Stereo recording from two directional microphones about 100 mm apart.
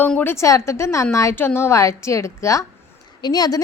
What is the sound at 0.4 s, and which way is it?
A woman's voice, 30° left (ahead or behind).